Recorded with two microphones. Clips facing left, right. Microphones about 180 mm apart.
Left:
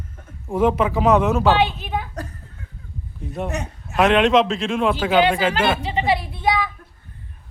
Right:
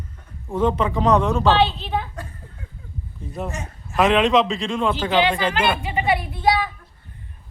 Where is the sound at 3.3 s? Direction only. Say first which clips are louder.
Left 3 dB; centre (ahead or behind).